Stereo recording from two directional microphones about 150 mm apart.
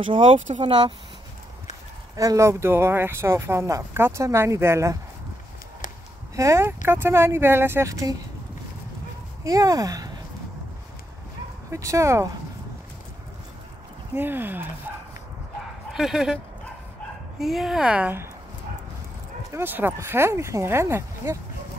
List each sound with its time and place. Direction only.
0.0 s speech: 35° right (ahead or behind)
2.1 s speech: 20° right (ahead or behind)
6.3 s speech: 20° right (ahead or behind)
9.4 s speech: 20° right (ahead or behind)
11.7 s speech: 20° right (ahead or behind)
14.1 s speech: 15° right (ahead or behind)
15.9 s speech: 5° right (ahead or behind)
17.4 s speech: centre (ahead or behind)
19.5 s speech: 15° right (ahead or behind)